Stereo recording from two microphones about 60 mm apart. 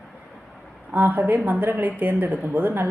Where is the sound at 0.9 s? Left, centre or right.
Right.